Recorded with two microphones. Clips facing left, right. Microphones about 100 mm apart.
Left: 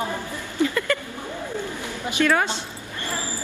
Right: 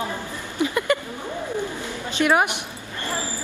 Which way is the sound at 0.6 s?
20° right (ahead or behind).